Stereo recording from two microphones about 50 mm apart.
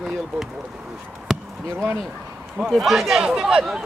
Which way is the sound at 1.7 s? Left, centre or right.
Right.